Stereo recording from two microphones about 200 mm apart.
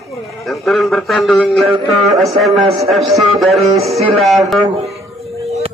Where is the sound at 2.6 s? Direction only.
30° right (ahead or behind).